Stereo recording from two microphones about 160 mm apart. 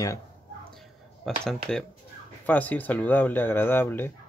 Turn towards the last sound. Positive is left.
turn(degrees=10)  # may be behind; listen again after turning